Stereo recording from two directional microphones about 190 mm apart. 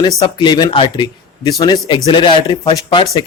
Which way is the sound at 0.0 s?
25° left (ahead or behind).